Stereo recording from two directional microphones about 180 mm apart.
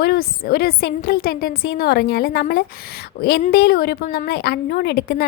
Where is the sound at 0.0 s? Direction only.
60° left (ahead or behind).